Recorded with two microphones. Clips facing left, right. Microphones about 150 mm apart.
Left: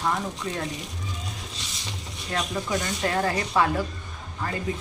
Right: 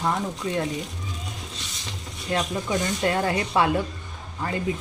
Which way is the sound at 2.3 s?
25° right (ahead or behind).